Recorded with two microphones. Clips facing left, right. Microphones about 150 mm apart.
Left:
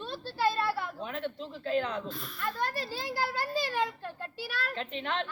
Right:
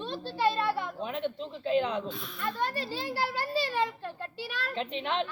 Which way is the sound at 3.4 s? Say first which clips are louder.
Right 2 dB; 10° left (ahead or behind).